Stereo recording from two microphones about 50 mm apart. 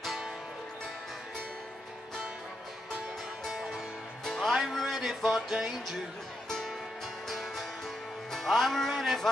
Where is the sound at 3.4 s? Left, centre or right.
Centre.